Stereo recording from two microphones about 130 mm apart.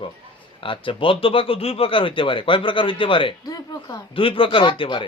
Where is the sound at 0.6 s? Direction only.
40° left (ahead or behind).